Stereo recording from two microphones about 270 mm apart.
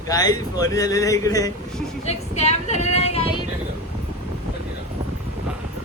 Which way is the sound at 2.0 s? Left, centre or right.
Left.